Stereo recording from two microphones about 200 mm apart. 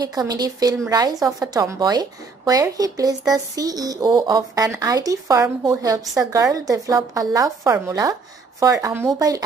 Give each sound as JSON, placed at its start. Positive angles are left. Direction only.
{"t": 0.0, "sound": "a woman's voice", "side_deg": -20}